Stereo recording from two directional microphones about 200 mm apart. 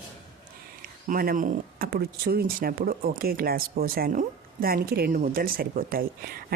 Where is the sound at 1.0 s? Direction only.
45° right (ahead or behind).